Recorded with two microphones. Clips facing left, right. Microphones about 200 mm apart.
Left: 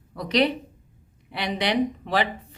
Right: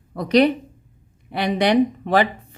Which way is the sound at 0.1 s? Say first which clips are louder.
Right 6 dB; 50° right (ahead or behind).